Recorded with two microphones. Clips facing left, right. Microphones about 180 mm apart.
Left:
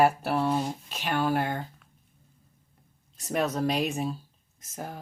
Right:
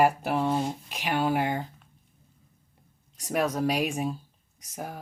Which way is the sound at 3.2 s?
10° right (ahead or behind).